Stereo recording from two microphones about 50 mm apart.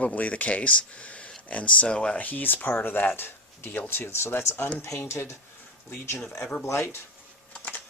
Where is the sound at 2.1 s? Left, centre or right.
Left.